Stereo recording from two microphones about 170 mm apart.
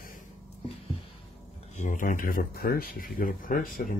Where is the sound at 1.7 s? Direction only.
50° left (ahead or behind).